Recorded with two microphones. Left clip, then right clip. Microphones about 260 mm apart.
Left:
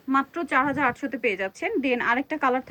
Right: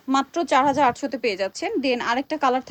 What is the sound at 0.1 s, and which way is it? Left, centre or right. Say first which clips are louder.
A woman's voice: right 3 dB; centre.